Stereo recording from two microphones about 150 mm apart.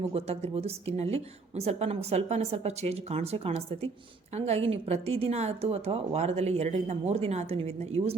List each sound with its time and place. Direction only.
0.1 s a woman's voice: 40° right (ahead or behind)